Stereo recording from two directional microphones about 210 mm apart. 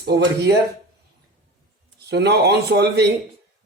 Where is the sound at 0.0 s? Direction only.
50° right (ahead or behind).